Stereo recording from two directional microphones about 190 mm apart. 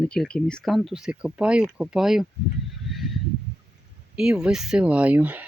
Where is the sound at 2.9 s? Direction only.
Centre (ahead or behind).